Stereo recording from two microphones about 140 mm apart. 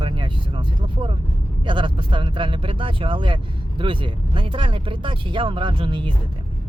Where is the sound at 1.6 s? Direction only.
35° right (ahead or behind).